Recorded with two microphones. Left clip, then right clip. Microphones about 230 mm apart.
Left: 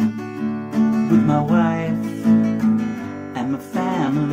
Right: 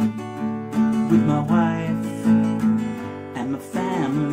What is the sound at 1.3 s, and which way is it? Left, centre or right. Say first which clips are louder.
Music: left 3 dB; centre.